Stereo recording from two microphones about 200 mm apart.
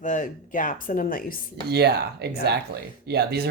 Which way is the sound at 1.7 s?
55° right (ahead or behind).